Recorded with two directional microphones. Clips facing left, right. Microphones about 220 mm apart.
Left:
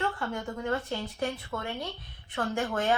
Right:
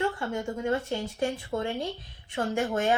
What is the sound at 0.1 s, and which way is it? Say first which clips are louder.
A woman's voice: right 3 dB; 25° right (ahead or behind).